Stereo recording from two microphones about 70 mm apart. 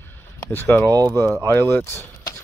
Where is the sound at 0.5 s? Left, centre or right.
Left.